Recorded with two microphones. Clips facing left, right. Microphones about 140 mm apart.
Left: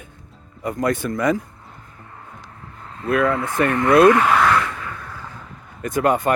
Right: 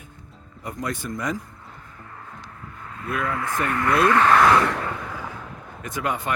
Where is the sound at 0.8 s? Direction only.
55° left (ahead or behind).